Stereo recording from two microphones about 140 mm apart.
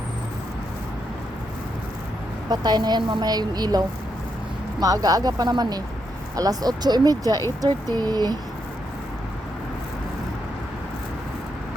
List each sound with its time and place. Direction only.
2.5 s a woman's voice: 30° right (ahead or behind)